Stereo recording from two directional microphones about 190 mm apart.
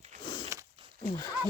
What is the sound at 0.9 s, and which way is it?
Speech, 20° left (ahead or behind).